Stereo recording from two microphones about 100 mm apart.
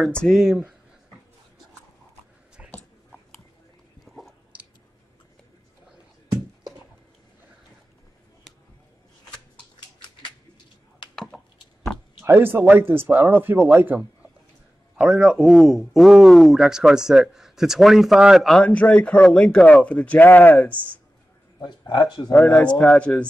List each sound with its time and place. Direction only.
0.0 s a man's voice: 5° left (ahead or behind)
4.0 s chewing: centre (ahead or behind)
11.3 s a sound: centre (ahead or behind)
12.2 s speech: 20° right (ahead or behind)
15.0 s a man's voice: 5° right (ahead or behind)
18.7 s speech: 10° left (ahead or behind)
21.6 s speech: 45° left (ahead or behind)
22.3 s speech: 20° left (ahead or behind)